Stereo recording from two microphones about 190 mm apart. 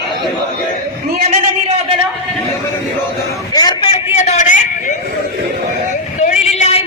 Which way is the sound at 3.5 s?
20° left (ahead or behind).